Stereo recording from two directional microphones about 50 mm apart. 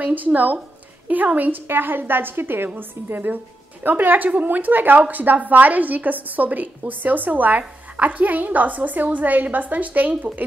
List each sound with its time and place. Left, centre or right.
0.0 s a woman's voice: right